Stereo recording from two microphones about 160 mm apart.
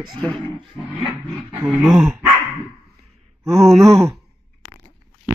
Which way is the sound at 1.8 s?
5° right (ahead or behind).